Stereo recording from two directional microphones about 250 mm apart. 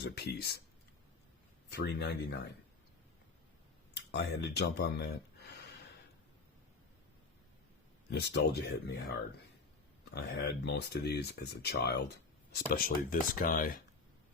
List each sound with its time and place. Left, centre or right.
0.0 s speech: left
1.7 s speech: left
4.1 s speech: left
8.1 s speech: left